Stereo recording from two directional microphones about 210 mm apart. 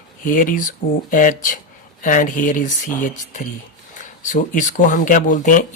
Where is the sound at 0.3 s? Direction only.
40° left (ahead or behind).